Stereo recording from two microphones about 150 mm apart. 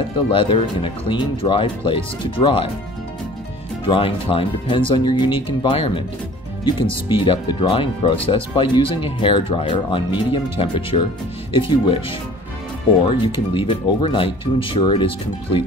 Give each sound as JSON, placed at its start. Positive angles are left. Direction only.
{"t": 0.3, "sound": "speech", "side_deg": 35}
{"t": 3.8, "sound": "speech", "side_deg": 35}
{"t": 13.3, "sound": "speech", "side_deg": 35}